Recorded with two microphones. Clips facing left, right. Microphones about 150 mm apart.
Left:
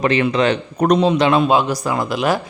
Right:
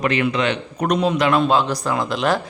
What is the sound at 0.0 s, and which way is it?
A man's voice, 30° left (ahead or behind).